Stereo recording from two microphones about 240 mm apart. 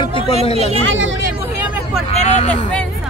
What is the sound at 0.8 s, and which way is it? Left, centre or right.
Speech, right.